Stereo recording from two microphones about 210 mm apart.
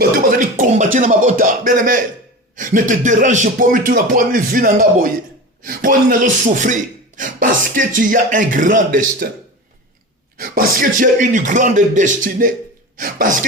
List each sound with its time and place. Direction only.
0.2 s a sound: 40° right (ahead or behind)
0.9 s music: 35° right (ahead or behind)
2.6 s speech: 40° right (ahead or behind)
7.2 s speech: 40° right (ahead or behind)
10.3 s speech: 45° right (ahead or behind)